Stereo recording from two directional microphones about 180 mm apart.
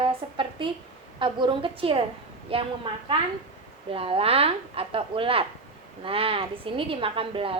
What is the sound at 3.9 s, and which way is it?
A woman's voice, 30° right (ahead or behind).